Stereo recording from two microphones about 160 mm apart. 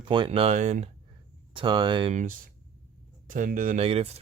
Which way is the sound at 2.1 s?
55° right (ahead or behind).